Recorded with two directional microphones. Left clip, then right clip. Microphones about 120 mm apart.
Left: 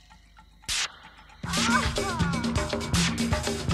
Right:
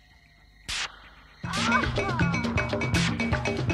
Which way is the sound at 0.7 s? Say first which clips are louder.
Left 2 dB; 35° left (ahead or behind).